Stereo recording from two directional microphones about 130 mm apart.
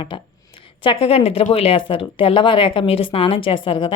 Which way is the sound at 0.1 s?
40° left (ahead or behind).